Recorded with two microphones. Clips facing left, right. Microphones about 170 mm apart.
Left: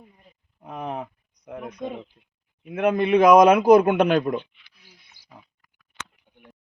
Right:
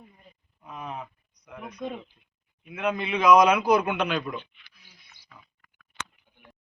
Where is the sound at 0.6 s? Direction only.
55° left (ahead or behind).